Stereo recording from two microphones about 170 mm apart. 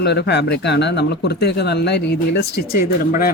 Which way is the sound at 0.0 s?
80° left.